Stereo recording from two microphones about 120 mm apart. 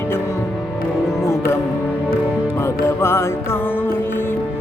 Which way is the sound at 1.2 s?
25° left (ahead or behind).